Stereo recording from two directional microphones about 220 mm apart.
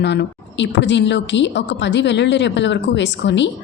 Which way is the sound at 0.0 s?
50° left (ahead or behind).